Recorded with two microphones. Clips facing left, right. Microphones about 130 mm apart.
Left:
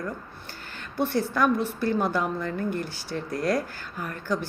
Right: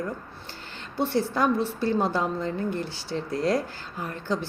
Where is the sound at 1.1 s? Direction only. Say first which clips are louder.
Even; 25° right (ahead or behind).